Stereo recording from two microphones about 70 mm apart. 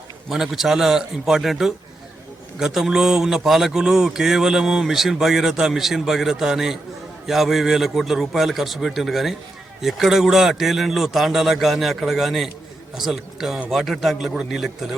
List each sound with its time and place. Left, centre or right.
0.3 s a man's voice: centre